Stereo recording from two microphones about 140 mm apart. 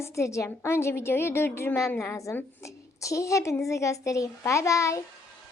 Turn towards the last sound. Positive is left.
turn(degrees=20)  # may be behind; listen again after turning